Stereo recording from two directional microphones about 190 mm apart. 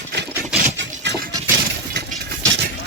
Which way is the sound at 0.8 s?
65° right (ahead or behind).